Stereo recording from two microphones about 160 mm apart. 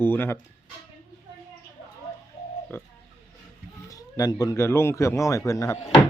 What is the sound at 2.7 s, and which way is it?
Speech, 15° left (ahead or behind).